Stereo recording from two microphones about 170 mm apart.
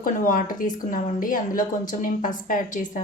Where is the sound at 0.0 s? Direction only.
55° left (ahead or behind).